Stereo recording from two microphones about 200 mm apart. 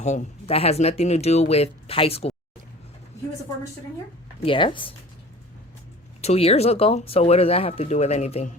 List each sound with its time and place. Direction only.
0.0 s speech: 35° left (ahead or behind)
4.4 s speech: 25° left (ahead or behind)
6.2 s speech: 30° left (ahead or behind)